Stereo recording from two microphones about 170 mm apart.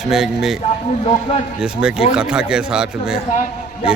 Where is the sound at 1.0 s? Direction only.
35° left (ahead or behind).